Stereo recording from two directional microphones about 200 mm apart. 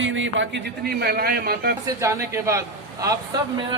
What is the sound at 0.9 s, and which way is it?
Speech, 50° right (ahead or behind).